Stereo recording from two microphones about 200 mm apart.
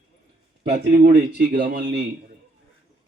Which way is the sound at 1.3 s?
55° right (ahead or behind).